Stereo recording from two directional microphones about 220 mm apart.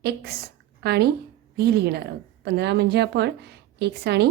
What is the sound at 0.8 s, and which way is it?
Speech, 45° right (ahead or behind).